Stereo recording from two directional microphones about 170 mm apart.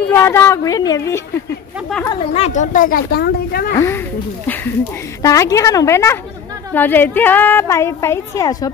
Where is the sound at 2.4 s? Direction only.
45° left (ahead or behind); by 3.8 s 65° left (ahead or behind).